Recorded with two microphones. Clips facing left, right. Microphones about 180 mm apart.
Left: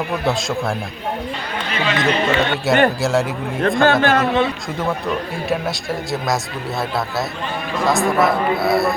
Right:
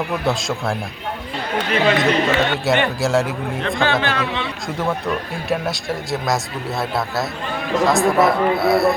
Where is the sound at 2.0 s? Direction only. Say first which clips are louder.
Even; centre (ahead or behind).